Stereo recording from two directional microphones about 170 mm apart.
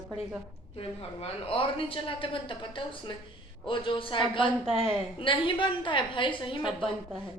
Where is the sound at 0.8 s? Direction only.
35° left (ahead or behind).